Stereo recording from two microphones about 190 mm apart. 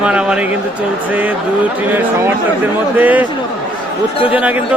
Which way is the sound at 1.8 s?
10° right (ahead or behind).